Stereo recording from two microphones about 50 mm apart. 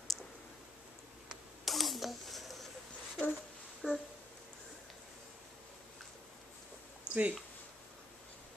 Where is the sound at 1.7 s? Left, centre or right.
Centre.